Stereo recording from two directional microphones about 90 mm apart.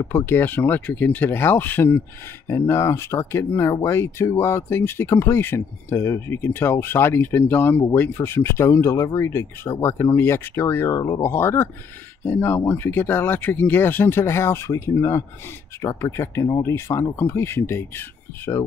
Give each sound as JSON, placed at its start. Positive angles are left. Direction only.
{"t": 0.1, "sound": "speech", "side_deg": 25}